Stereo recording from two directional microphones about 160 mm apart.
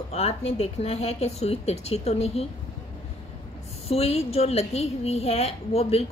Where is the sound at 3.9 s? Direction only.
40° left (ahead or behind).